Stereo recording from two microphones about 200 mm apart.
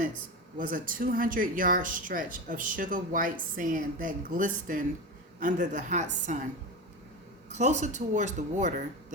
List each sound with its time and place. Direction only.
0.6 s speech: 40° right (ahead or behind)
7.5 s speech: 35° right (ahead or behind)